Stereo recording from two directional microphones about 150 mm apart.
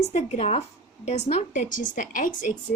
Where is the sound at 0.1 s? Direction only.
45° left (ahead or behind).